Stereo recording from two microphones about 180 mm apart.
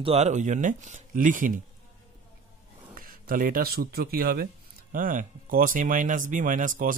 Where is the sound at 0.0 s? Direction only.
35° right (ahead or behind).